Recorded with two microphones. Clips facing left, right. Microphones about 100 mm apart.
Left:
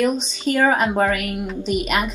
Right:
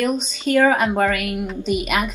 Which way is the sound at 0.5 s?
10° left (ahead or behind).